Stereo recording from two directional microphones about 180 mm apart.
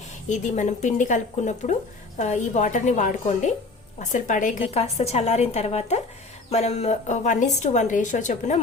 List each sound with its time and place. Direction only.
0.3 s a woman's voice: 40° left (ahead or behind)